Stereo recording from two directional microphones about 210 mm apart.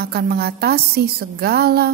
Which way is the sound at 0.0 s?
50° right (ahead or behind).